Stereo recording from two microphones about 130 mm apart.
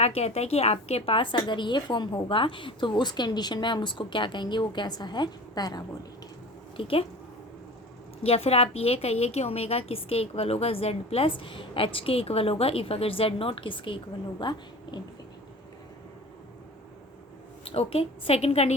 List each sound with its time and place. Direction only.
0.0 s a woman's voice: 55° left (ahead or behind); by 6.0 s 30° left (ahead or behind)
6.7 s a woman's voice: 45° left (ahead or behind)
8.2 s a woman's voice: 50° left (ahead or behind)
17.7 s a woman's voice: 45° left (ahead or behind)